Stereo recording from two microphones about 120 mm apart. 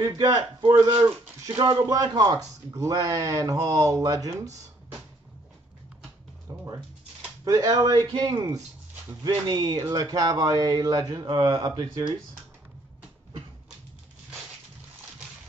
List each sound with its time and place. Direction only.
0.0 s speech: 30° right (ahead or behind)
6.5 s a sound: 35° right (ahead or behind)
7.4 s speech: 25° right (ahead or behind)